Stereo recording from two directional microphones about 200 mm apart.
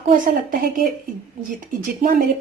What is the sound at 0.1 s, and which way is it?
Speech, 45° right (ahead or behind).